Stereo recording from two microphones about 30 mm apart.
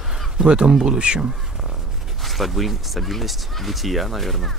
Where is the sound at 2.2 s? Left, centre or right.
Centre.